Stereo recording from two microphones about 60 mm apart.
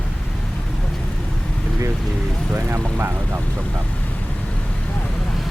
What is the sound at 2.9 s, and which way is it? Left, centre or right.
Speech, right.